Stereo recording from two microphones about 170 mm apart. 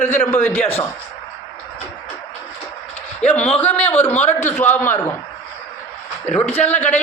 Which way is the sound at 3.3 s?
5° left (ahead or behind).